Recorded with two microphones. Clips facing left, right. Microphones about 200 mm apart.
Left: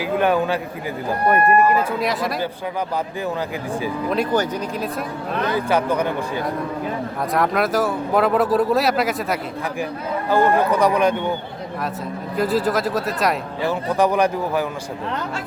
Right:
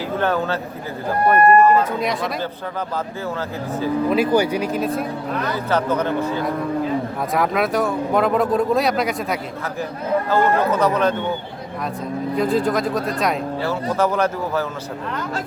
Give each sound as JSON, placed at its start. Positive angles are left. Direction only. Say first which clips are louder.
{"t": 0.0, "sound": "speech", "louder": "left 2 dB", "side_deg": 15}
{"t": 4.1, "sound": "speech", "louder": "right 2 dB", "side_deg": -5}
{"t": 5.5, "sound": "a man's voice", "louder": "left 1 dB", "side_deg": 10}
{"t": 7.3, "sound": "speech", "louder": "even", "side_deg": 0}
{"t": 10.2, "sound": "a man's voice", "louder": "left 3 dB", "side_deg": 15}
{"t": 12.4, "sound": "speech", "louder": "even", "side_deg": 5}
{"t": 13.6, "sound": "a man's voice", "louder": "left 2 dB", "side_deg": 15}